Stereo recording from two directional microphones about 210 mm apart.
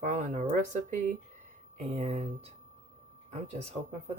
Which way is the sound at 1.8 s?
30° right (ahead or behind).